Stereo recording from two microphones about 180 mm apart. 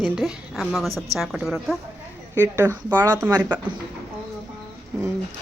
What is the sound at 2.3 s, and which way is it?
A woman's voice, 15° right (ahead or behind).